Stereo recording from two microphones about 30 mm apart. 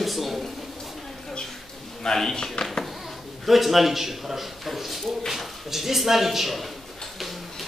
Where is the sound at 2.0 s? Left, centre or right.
Centre.